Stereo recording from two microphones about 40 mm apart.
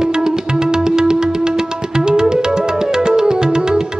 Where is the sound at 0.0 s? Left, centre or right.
Centre.